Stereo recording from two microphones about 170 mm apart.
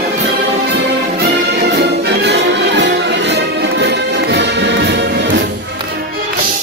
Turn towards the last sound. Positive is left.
turn(degrees=-90)